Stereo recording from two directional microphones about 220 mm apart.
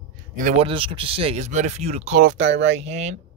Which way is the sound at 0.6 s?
25° right (ahead or behind).